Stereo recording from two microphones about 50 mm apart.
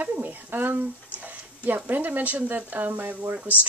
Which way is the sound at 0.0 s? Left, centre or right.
Right.